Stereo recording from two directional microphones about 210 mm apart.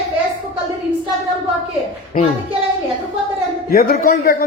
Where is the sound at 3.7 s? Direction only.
45° left (ahead or behind).